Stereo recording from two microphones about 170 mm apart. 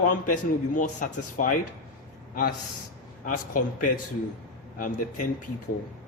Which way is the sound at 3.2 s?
55° left (ahead or behind).